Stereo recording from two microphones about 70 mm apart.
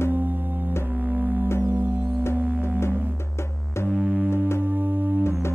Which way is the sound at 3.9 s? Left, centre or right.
Right.